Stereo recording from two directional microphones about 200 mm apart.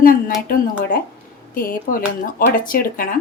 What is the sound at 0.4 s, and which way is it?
Speech, 45° left (ahead or behind).